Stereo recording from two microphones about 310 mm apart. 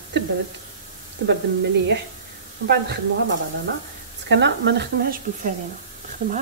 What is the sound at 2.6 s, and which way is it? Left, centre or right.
Speech, right.